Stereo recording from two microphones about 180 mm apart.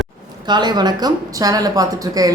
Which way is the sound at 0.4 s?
25° right (ahead or behind).